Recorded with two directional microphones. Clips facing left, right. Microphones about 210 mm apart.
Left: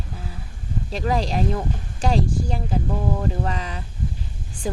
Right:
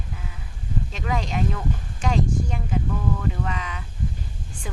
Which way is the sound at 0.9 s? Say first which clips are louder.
Left 5 dB; 35° left (ahead or behind).